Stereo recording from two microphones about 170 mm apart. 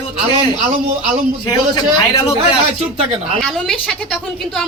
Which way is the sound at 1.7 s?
20° left (ahead or behind).